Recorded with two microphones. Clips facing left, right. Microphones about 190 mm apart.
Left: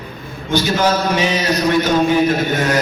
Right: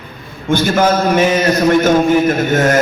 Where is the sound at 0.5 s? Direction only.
50° right (ahead or behind).